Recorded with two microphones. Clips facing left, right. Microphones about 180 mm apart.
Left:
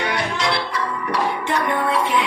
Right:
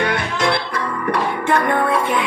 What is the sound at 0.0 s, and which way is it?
Music, 55° right (ahead or behind).